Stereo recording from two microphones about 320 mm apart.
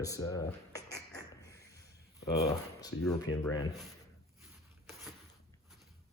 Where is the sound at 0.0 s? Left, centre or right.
Centre.